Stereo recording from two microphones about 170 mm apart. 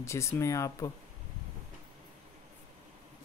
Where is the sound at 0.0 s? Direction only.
15° left (ahead or behind).